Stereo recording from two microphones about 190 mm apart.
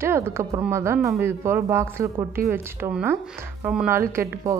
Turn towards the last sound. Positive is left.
turn(degrees=-15)  # may be behind; listen again after turning